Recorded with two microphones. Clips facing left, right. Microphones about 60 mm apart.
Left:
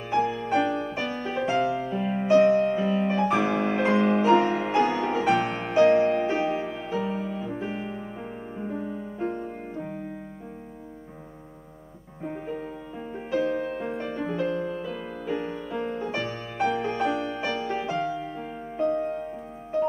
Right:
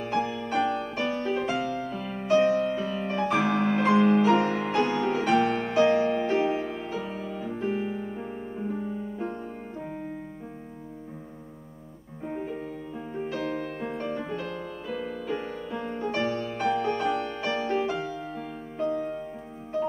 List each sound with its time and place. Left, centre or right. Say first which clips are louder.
0.0 s music: left 3 dB; centre
9.2 s music: left 7 dB; centre
13.1 s music: left 5 dB; centre
14.5 s music: left 5 dB; centre
18.0 s music: left 3 dB; centre